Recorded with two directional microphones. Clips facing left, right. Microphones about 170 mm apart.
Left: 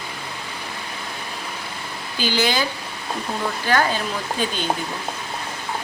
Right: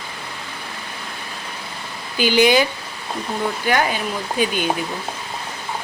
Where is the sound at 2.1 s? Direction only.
15° right (ahead or behind).